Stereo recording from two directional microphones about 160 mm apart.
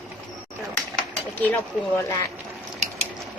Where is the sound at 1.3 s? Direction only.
15° left (ahead or behind).